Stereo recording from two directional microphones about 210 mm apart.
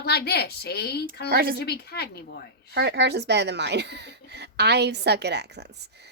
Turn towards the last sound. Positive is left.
turn(degrees=-50)  # may be behind; listen again after turning